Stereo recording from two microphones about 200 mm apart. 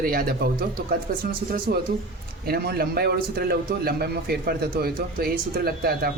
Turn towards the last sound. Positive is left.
turn(degrees=-50)  # may be behind; listen again after turning